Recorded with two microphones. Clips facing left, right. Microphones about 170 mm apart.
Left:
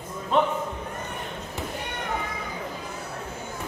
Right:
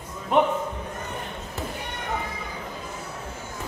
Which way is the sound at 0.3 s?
15° right (ahead or behind).